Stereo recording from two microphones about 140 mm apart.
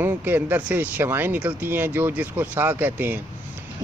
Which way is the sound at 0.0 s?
15° right (ahead or behind).